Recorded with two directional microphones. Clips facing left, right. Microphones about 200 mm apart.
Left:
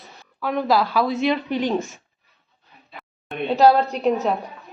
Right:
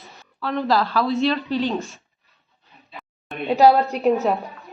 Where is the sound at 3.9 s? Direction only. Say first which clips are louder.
Right 2 dB; centre (ahead or behind).